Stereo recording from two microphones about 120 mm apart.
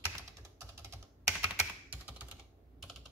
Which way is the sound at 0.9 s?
20° right (ahead or behind).